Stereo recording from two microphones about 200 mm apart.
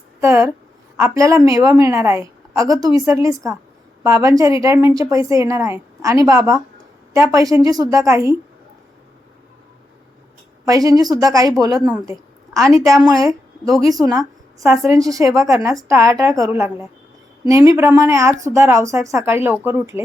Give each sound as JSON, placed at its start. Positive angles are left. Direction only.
{"t": 0.2, "sound": "a woman's voice", "side_deg": -15}
{"t": 10.7, "sound": "a woman's voice", "side_deg": -20}
{"t": 11.9, "sound": "a woman's voice", "side_deg": -5}
{"t": 14.1, "sound": "a sound", "side_deg": -15}
{"t": 14.8, "sound": "a woman's voice", "side_deg": -15}